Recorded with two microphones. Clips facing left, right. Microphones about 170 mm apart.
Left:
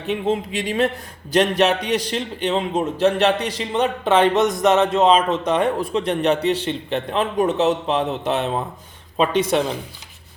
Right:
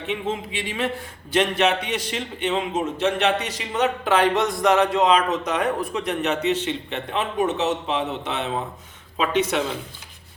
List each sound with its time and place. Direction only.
0.1 s a man's voice: 40° left (ahead or behind)